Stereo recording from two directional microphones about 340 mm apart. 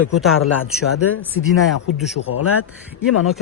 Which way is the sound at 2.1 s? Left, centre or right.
Left.